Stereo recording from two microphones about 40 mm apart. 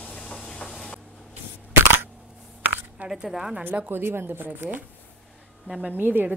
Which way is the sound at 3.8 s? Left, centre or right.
Right.